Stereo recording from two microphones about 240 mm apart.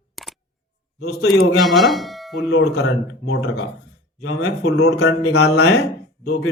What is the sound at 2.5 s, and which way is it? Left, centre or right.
Speech, left.